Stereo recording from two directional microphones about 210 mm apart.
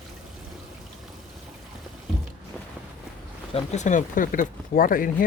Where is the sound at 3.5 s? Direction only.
35° left (ahead or behind).